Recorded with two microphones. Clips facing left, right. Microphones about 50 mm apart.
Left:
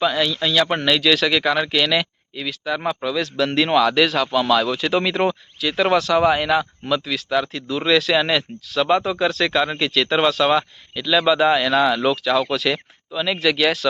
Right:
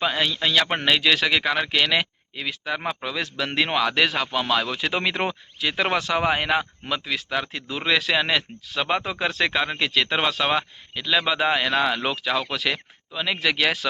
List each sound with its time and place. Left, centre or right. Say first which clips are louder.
0.0 s speech: left 3 dB; right
3.3 s speech: left 6 dB; centre